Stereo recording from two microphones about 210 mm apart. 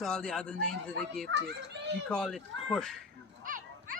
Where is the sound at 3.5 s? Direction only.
40° right (ahead or behind).